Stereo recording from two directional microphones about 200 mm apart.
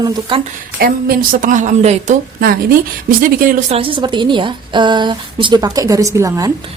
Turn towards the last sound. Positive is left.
turn(degrees=-15)  # may be behind; listen again after turning